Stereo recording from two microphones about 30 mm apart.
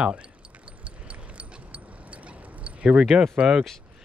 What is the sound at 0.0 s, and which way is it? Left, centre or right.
Speech, right.